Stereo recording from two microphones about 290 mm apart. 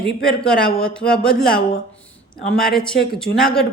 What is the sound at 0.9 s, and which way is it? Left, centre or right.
Speech, centre.